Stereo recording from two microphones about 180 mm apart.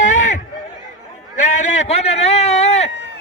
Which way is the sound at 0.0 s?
40° left (ahead or behind).